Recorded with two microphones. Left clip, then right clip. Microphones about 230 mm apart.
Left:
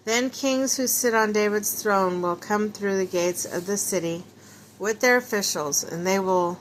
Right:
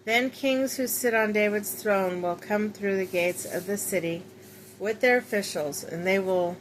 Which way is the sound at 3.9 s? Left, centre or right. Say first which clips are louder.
Left 2 dB; centre.